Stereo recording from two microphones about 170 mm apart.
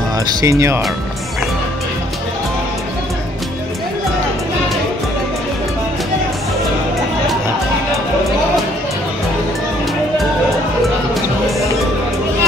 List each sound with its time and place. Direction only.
0.4 s speech: 15° right (ahead or behind)